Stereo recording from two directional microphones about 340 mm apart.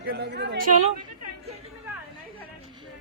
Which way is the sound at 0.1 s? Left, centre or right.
Right.